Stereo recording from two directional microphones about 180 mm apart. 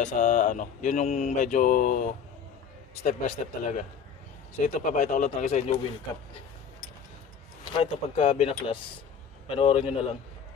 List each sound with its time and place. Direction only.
0.0 s speech: 45° left (ahead or behind)
7.7 s a man's voice: 35° left (ahead or behind)